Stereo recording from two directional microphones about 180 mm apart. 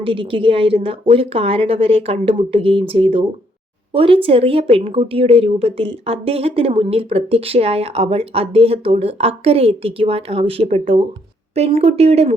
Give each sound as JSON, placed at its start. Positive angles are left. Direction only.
{"t": 0.0, "sound": "a woman's voice", "side_deg": -30}